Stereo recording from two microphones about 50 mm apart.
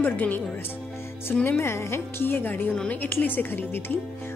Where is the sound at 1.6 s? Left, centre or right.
Left.